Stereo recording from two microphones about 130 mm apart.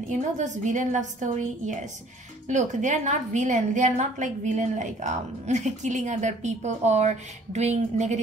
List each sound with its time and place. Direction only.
0.1 s a woman's voice: 70° right (ahead or behind)